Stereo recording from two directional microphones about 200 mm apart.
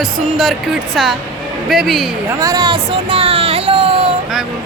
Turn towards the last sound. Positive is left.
turn(degrees=-30)  # may be behind; listen again after turning